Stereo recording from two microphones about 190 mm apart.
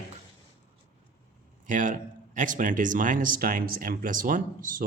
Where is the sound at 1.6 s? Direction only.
45° right (ahead or behind).